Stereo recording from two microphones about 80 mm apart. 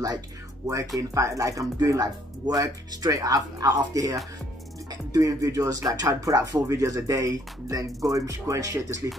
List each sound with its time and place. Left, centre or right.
0.7 s speech: right